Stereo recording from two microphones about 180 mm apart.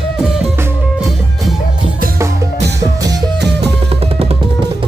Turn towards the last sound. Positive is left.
turn(degrees=-70)  # may be behind; listen again after turning